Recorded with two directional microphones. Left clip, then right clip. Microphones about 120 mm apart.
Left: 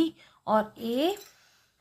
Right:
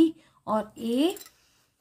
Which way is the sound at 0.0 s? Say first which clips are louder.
Right 5 dB; 35° right (ahead or behind).